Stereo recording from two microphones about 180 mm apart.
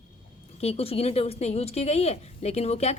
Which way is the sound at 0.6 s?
35° left (ahead or behind).